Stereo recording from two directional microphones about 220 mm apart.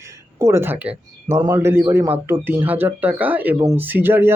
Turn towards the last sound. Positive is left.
turn(degrees=-10)  # may be behind; listen again after turning